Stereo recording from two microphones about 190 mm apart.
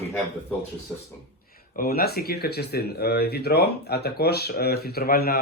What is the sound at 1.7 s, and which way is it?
Speech, 55° left (ahead or behind).